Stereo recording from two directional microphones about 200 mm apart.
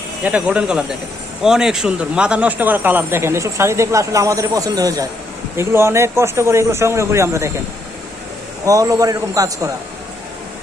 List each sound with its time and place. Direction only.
0.3 s speech: 5° right (ahead or behind)
8.6 s speech: 15° right (ahead or behind)